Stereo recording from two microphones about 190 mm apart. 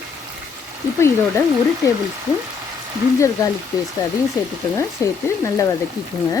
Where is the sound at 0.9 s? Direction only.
15° left (ahead or behind).